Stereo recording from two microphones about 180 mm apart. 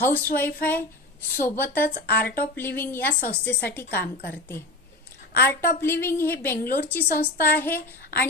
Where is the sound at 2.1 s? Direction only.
60° left (ahead or behind).